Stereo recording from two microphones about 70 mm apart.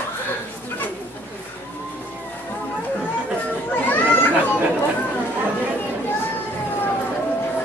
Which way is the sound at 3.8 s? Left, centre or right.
Left.